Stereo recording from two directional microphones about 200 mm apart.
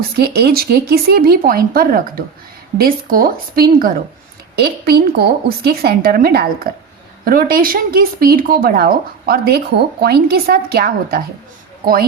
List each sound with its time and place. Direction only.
0.2 s speech: 55° right (ahead or behind)